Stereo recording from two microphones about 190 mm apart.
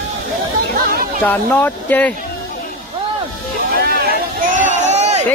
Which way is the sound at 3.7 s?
55° right (ahead or behind).